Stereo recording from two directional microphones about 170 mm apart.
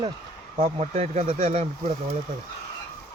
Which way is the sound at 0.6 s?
40° right (ahead or behind).